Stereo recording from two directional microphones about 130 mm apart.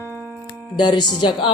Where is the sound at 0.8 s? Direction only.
35° left (ahead or behind).